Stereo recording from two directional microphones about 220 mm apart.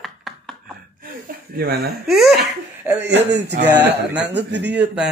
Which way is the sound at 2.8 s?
10° right (ahead or behind).